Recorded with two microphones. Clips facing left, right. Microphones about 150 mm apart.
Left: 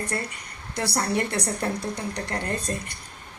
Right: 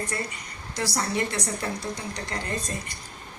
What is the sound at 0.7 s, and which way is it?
A woman's voice, 60° left (ahead or behind).